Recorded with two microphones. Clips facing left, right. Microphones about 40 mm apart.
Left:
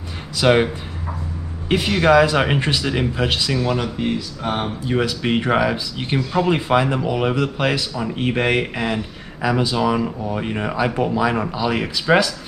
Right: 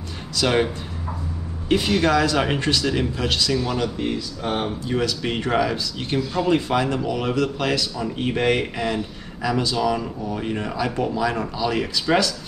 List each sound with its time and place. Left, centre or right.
0.4 s speech: left
1.7 s speech: centre